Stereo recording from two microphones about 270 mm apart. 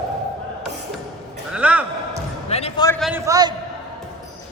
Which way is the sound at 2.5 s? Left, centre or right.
Left.